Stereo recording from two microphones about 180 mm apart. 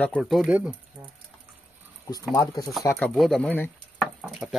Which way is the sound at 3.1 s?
Centre (ahead or behind).